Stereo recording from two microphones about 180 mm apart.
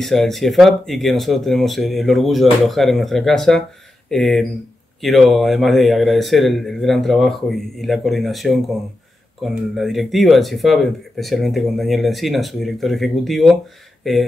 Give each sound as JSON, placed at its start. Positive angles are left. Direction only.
{"t": 0.0, "sound": "speech", "side_deg": 0}